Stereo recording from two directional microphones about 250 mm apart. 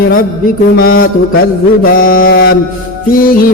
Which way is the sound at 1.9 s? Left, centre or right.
Left.